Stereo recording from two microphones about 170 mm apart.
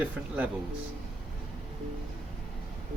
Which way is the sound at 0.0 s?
10° right (ahead or behind).